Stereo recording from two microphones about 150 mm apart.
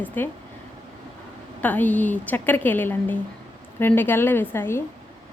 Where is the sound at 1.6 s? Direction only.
10° left (ahead or behind).